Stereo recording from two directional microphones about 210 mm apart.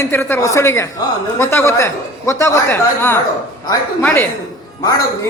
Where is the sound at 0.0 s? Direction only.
10° left (ahead or behind).